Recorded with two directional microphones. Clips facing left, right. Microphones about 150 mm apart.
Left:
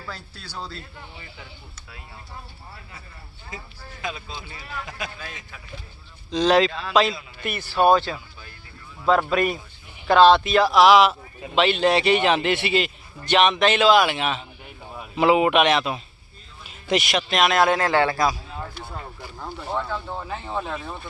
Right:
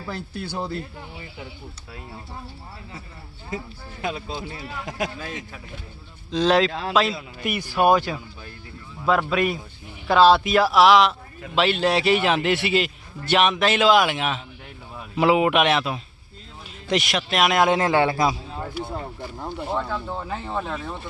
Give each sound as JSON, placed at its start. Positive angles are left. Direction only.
{"t": 0.5, "sound": "speech", "side_deg": -20}
{"t": 4.0, "sound": "speech", "side_deg": -50}
{"t": 4.6, "sound": "speech", "side_deg": -20}
{"t": 4.9, "sound": "speech", "side_deg": -75}
{"t": 6.3, "sound": "a man's voice", "side_deg": 0}
{"t": 6.7, "sound": "speech", "side_deg": -65}
{"t": 6.9, "sound": "a man's voice", "side_deg": 0}
{"t": 7.4, "sound": "a man's voice", "side_deg": -15}
{"t": 9.0, "sound": "a man's voice", "side_deg": 0}
{"t": 19.5, "sound": "a man's voice", "side_deg": -10}
{"t": 19.9, "sound": "a man's voice", "side_deg": 0}